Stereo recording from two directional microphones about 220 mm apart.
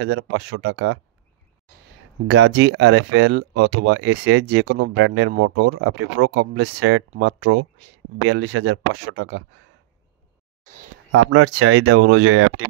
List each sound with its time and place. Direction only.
0.0 s speech: 60° right (ahead or behind)
2.2 s speech: 55° right (ahead or behind)
11.1 s speech: 65° right (ahead or behind)